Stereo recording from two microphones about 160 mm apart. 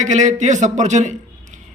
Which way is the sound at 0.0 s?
50° right (ahead or behind).